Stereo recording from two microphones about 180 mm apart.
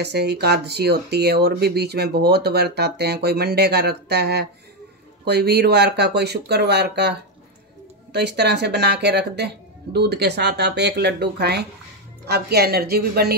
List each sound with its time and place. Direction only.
0.0 s speech: 65° right (ahead or behind)